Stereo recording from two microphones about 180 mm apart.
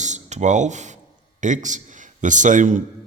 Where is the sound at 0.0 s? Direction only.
40° right (ahead or behind).